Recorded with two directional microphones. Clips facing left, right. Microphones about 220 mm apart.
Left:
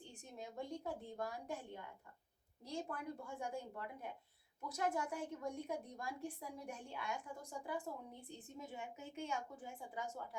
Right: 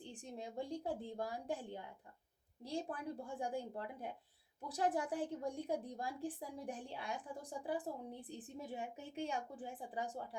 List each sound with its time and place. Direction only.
0.0 s a woman's voice: 30° right (ahead or behind)